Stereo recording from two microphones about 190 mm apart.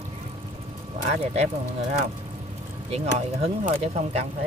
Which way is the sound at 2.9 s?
35° right (ahead or behind).